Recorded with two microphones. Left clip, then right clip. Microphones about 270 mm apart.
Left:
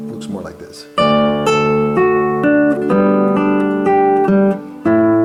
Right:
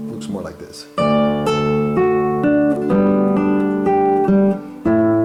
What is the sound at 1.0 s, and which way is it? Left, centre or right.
Music, centre.